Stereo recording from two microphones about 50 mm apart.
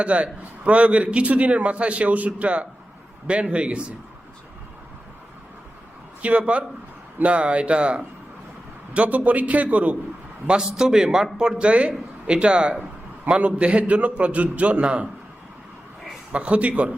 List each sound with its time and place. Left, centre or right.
0.0 s a man's voice: right
6.2 s a man's voice: right
10.4 s a man's voice: centre
16.3 s a man's voice: right